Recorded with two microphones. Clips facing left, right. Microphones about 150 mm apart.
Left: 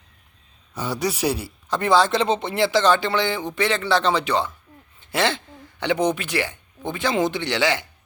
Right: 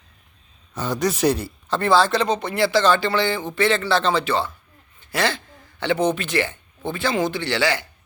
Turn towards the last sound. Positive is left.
turn(degrees=20)  # may be behind; listen again after turning